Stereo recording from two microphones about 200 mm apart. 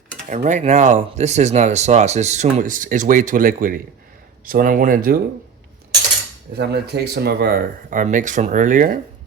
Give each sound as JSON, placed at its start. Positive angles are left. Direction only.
{"t": 0.3, "sound": "speech", "side_deg": -40}
{"t": 6.6, "sound": "speech", "side_deg": -55}